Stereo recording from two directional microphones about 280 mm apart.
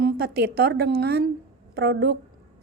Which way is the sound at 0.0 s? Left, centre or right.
Right.